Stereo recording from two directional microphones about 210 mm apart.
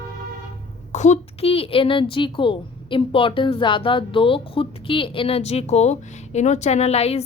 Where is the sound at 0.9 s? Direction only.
35° left (ahead or behind).